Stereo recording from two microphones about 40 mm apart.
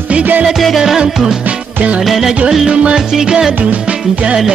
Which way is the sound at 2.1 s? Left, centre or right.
Centre.